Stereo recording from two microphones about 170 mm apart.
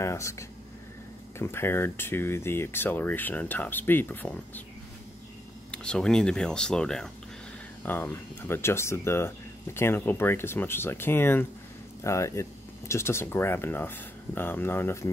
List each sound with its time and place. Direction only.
0.0 s speech: 15° left (ahead or behind)
5.7 s speech: 5° left (ahead or behind)